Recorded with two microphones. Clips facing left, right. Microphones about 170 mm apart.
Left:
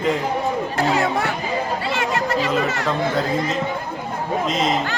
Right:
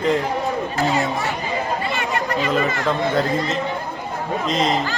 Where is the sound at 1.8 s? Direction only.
90° left.